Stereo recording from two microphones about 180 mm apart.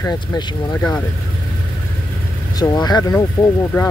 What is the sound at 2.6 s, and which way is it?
Speech, 20° left (ahead or behind).